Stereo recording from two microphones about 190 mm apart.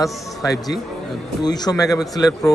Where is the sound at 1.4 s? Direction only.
20° left (ahead or behind).